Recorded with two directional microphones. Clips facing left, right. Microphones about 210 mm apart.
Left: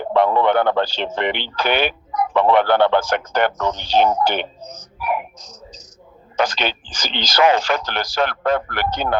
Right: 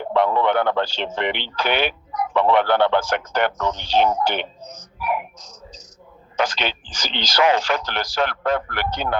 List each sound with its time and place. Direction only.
0.0 s speech: 40° left (ahead or behind)